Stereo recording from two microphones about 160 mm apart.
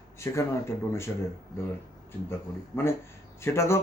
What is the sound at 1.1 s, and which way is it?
Speech, 15° left (ahead or behind).